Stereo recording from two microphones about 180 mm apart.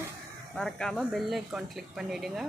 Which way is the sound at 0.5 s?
5° left (ahead or behind).